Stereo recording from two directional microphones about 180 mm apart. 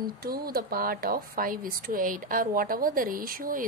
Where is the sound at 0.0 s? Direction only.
60° right (ahead or behind).